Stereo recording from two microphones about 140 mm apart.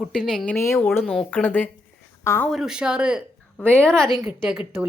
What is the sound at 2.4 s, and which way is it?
Speech, centre (ahead or behind).